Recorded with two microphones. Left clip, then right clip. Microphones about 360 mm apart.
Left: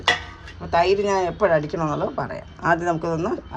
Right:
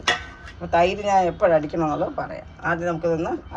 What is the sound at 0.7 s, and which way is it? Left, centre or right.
Speech, centre.